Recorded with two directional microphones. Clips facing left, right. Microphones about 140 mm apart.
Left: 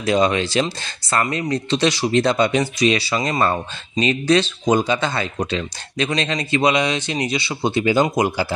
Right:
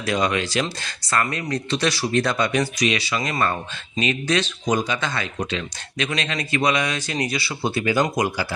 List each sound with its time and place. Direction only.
0.0 s speech: 25° left (ahead or behind)